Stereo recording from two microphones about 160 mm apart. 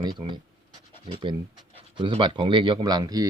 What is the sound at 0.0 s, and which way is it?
Speech, 25° right (ahead or behind).